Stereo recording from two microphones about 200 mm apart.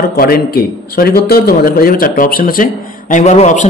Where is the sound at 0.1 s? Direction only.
50° left (ahead or behind).